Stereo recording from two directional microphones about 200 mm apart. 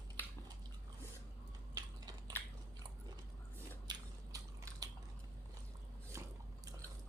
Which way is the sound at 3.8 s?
20° right (ahead or behind).